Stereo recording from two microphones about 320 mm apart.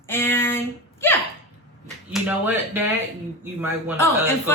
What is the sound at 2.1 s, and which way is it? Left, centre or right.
Speech, centre.